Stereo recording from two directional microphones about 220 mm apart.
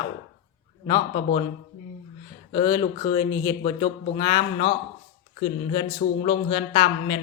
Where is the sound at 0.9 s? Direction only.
20° left (ahead or behind).